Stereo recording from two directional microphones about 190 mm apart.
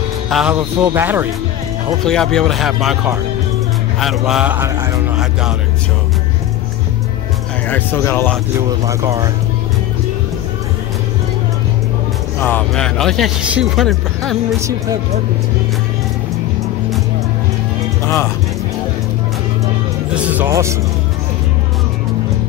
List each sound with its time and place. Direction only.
0.3 s speech: 5° right (ahead or behind)
2.0 s speech: 5° left (ahead or behind)
7.7 s speech: 10° left (ahead or behind)
8.5 s speech: 15° right (ahead or behind)
12.4 s speech: 10° left (ahead or behind)
18.0 s speech: 15° left (ahead or behind)
20.2 s speech: 10° right (ahead or behind)